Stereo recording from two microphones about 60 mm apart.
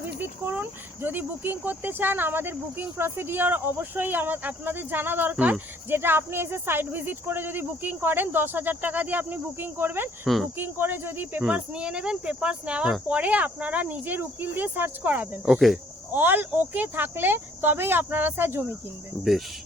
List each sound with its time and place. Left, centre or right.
0.2 s speech: right
5.9 s speech: right
11.4 s speech: centre
15.4 s speech: centre
16.1 s speech: right